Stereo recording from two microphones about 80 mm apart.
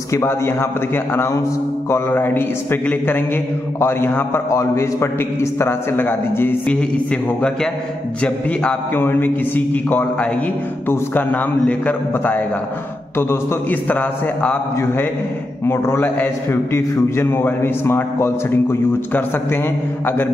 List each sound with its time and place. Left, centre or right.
0.1 s a man's voice: left
6.7 s a man's voice: centre
9.0 s a man's voice: left
15.6 s a man's voice: left